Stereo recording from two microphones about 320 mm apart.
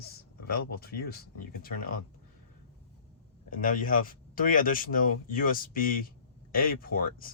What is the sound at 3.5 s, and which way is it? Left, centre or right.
Speech, left.